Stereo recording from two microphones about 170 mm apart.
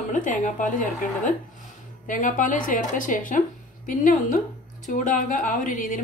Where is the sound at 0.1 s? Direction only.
45° left (ahead or behind).